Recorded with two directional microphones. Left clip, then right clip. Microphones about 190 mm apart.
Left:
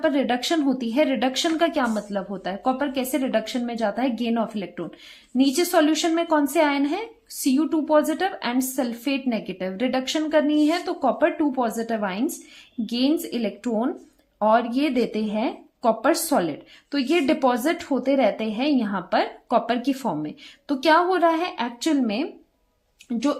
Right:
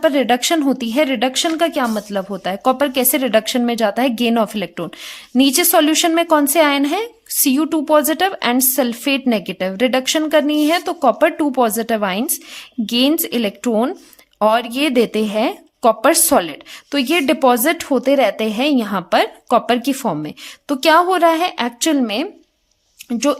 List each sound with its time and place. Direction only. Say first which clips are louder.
0.0 s speech: right 7 dB; 35° right (ahead or behind)